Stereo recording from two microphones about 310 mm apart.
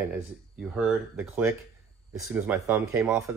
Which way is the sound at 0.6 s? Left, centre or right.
Centre.